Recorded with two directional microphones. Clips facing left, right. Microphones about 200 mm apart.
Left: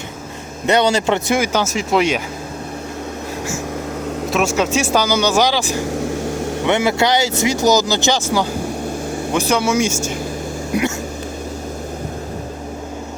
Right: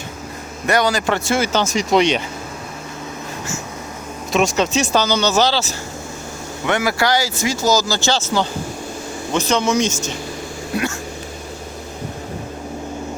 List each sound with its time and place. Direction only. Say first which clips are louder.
0.7 s speech: left 3 dB; 25° left (ahead or behind); by 2.2 s 5° left (ahead or behind)
4.3 s speech: right 1 dB; 5° left (ahead or behind)